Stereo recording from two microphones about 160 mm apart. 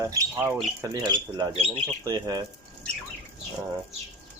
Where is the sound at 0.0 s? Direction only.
20° right (ahead or behind).